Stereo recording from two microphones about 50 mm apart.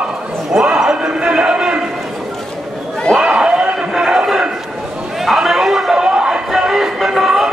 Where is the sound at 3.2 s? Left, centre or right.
Centre.